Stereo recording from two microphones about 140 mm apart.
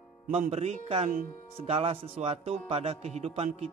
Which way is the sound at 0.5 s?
50° right (ahead or behind).